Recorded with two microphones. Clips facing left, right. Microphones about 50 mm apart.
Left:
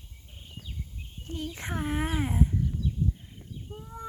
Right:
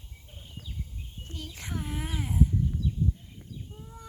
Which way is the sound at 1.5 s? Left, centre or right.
Left.